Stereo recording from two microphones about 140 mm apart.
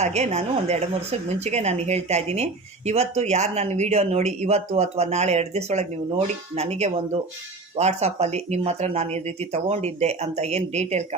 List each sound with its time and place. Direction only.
0.0 s speech: 50° right (ahead or behind)